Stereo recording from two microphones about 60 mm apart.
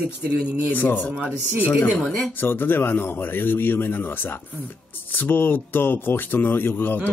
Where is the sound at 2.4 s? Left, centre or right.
Left.